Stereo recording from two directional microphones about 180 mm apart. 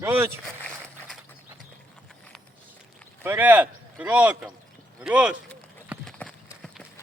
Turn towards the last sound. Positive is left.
turn(degrees=0)  # may be behind; listen again after turning